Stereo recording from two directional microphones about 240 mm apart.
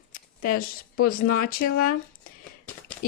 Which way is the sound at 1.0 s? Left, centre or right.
Left.